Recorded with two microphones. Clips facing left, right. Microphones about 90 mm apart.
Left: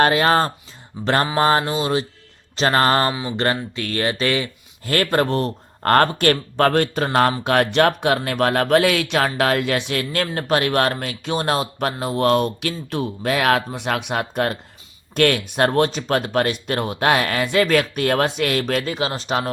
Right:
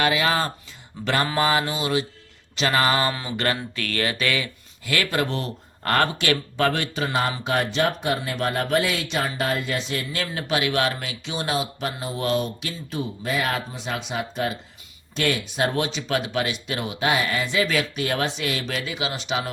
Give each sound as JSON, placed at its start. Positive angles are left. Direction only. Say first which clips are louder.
{"t": 0.0, "sound": "speech", "louder": "left 6 dB", "side_deg": 45}
{"t": 1.0, "sound": "mantra", "louder": "left 4 dB", "side_deg": 40}
{"t": 2.6, "sound": "speech", "louder": "left 4 dB", "side_deg": 40}
{"t": 3.1, "sound": "speech", "louder": "left 4 dB", "side_deg": 15}
{"t": 3.3, "sound": "speech", "louder": "left 4 dB", "side_deg": 30}
{"t": 4.9, "sound": "speech", "louder": "left 5 dB", "side_deg": 45}
{"t": 7.1, "sound": "speech", "louder": "left 6 dB", "side_deg": 65}